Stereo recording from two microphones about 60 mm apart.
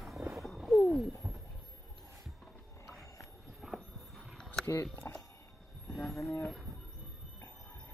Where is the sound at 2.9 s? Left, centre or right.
Centre.